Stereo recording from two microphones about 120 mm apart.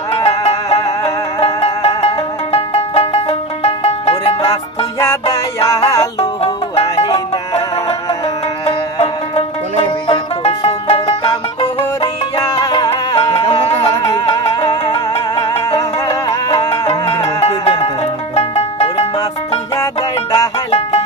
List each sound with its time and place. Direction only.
0.4 s music: 55° left (ahead or behind)
0.7 s music: 30° left (ahead or behind)
1.4 s music: 55° left (ahead or behind)
5.1 s music: 30° left (ahead or behind)
6.4 s music: 55° left (ahead or behind)
8.6 s music: 45° left (ahead or behind)
10.4 s banjo: 55° left (ahead or behind)
12.0 s music: 35° left (ahead or behind); by 15.6 s 50° left (ahead or behind)
15.7 s music: 35° left (ahead or behind)
16.9 s music: 55° left (ahead or behind)
19.8 s music: 30° left (ahead or behind)